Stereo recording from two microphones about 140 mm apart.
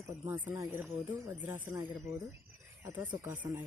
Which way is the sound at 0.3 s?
15° right (ahead or behind).